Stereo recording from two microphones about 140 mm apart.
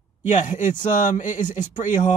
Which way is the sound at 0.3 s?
65° left (ahead or behind).